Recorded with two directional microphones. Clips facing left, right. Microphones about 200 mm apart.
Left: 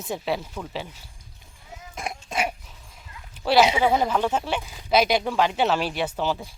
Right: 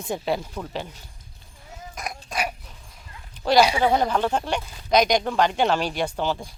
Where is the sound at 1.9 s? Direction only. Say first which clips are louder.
Left 2 dB; 25° left (ahead or behind).